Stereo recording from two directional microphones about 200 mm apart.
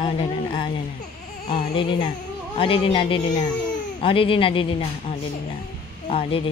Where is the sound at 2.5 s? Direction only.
25° left (ahead or behind).